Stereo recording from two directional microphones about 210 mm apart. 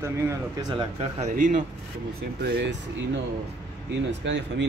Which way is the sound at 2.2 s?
50° right (ahead or behind).